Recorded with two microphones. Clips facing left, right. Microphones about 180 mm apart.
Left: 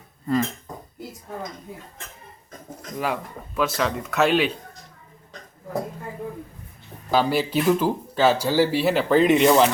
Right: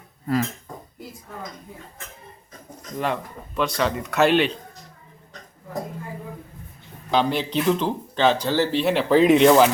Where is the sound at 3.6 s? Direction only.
Centre (ahead or behind).